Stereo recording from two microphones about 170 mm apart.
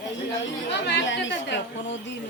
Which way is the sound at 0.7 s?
90° left.